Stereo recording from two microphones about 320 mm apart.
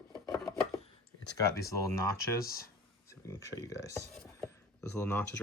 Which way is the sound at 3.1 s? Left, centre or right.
Centre.